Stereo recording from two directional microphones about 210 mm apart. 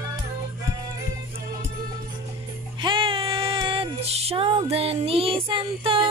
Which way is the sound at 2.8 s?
25° right (ahead or behind).